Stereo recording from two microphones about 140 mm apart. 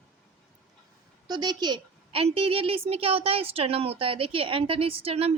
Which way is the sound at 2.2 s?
45° right (ahead or behind).